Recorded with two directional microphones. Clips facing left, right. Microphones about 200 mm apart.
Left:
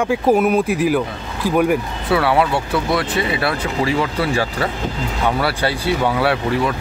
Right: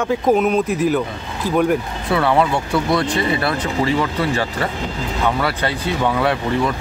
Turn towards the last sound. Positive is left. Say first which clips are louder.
# left 1 dB
turn(degrees=10)  # may be behind; listen again after turning